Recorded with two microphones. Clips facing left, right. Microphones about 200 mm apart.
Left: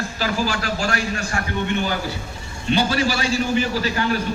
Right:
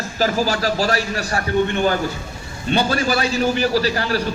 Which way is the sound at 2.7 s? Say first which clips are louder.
Right 1 dB; 50° right (ahead or behind).